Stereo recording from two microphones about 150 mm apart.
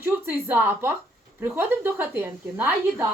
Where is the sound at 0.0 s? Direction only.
15° right (ahead or behind).